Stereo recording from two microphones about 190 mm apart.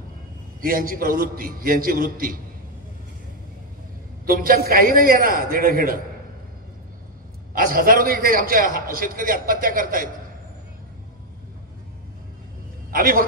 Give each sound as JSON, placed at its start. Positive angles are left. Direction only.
{"t": 0.6, "sound": "a man's voice", "side_deg": -50}
{"t": 4.3, "sound": "a man's voice", "side_deg": -50}
{"t": 7.5, "sound": "a man's voice", "side_deg": -50}
{"t": 12.9, "sound": "a man's voice", "side_deg": -50}